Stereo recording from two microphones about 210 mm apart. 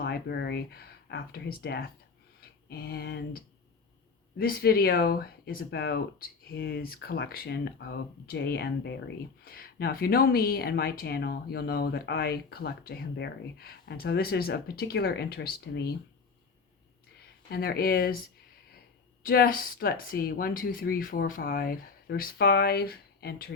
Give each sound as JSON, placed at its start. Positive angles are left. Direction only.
{"t": 0.0, "sound": "speech", "side_deg": 50}
{"t": 17.5, "sound": "speech", "side_deg": 45}
{"t": 19.2, "sound": "speech", "side_deg": 45}